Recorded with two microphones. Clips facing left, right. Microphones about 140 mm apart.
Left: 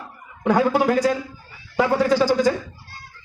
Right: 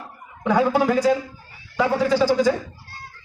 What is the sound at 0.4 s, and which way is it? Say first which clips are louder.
Speech: left 1 dB; 60° left (ahead or behind).